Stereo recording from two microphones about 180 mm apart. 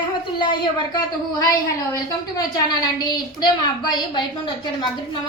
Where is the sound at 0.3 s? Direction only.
25° left (ahead or behind).